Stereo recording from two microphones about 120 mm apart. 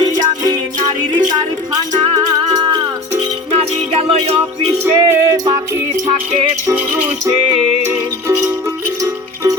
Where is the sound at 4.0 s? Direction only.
60° right (ahead or behind).